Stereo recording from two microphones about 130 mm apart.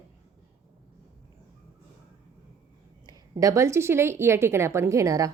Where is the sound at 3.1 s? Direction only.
25° right (ahead or behind).